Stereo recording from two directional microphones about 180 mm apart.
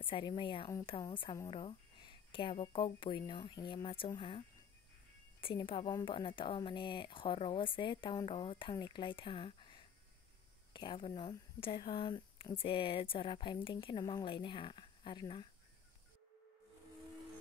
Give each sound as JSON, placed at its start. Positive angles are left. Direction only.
{"t": 0.0, "sound": "speech", "side_deg": 25}